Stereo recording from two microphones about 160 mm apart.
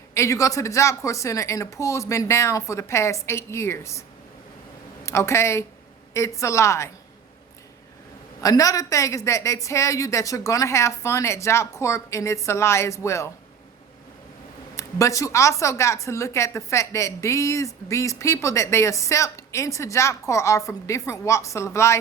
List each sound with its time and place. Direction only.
0.1 s a woman's voice: 20° left (ahead or behind)
5.0 s a woman's voice: 15° left (ahead or behind)
8.4 s a woman's voice: 20° left (ahead or behind)
14.8 s a woman's voice: 20° left (ahead or behind)